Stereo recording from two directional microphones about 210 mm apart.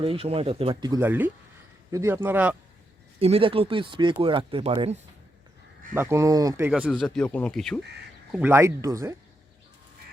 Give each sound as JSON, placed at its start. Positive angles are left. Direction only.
{"t": 0.0, "sound": "speech", "side_deg": -25}
{"t": 3.2, "sound": "speech", "side_deg": -30}
{"t": 5.9, "sound": "speech", "side_deg": -10}
{"t": 7.0, "sound": "speech", "side_deg": 5}
{"t": 8.3, "sound": "speech", "side_deg": -10}